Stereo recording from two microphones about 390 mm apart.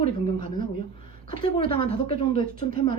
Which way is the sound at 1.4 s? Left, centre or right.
Centre.